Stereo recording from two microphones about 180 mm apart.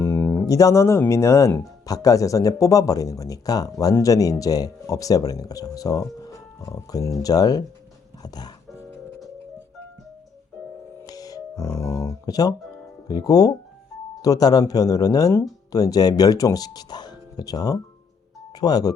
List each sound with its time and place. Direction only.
0.0 s speech: 15° left (ahead or behind)
11.0 s music: 20° left (ahead or behind)
13.1 s speech: 20° left (ahead or behind)